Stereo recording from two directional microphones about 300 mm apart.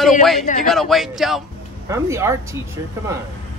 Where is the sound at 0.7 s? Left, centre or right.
Centre.